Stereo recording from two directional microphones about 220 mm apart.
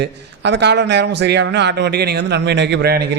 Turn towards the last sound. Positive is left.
turn(degrees=-45)  # may be behind; listen again after turning